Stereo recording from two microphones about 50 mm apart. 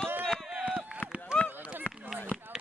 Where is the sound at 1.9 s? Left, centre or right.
Left.